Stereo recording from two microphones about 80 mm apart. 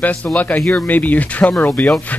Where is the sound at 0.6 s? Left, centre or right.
Left.